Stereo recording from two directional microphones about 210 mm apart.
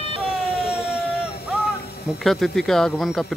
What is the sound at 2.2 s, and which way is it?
Speech, centre (ahead or behind).